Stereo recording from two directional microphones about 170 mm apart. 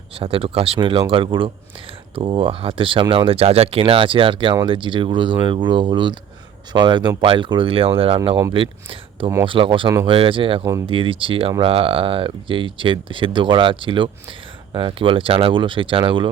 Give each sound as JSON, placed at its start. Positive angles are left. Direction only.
{"t": 0.2, "sound": "speech", "side_deg": -35}